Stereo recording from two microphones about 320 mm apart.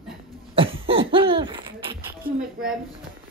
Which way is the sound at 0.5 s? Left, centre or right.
Centre.